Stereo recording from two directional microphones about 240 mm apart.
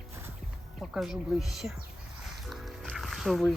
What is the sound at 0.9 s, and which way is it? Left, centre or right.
Speech, centre.